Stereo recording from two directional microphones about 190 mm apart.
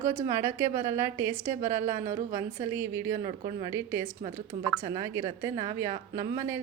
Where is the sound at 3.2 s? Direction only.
30° right (ahead or behind).